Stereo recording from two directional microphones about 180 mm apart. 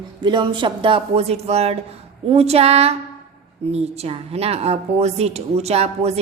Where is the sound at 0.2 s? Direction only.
25° right (ahead or behind).